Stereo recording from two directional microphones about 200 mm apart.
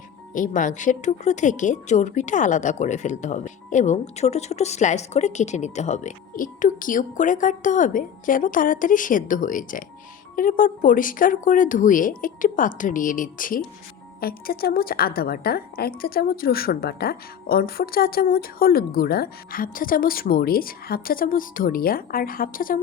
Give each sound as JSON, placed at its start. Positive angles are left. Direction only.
{"t": 0.3, "sound": "a woman's voice", "side_deg": 40}